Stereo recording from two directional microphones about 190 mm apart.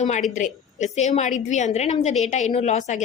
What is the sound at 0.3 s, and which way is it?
A woman's voice, 40° left (ahead or behind).